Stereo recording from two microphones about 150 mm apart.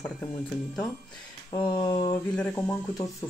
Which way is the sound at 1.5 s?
30° left (ahead or behind).